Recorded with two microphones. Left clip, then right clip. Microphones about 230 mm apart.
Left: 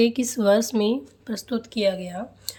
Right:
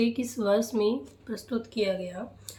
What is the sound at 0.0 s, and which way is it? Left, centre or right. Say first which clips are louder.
Speech: left 8 dB; left.